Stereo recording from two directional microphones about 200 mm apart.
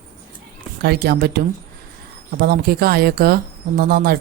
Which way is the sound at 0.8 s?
50° right (ahead or behind).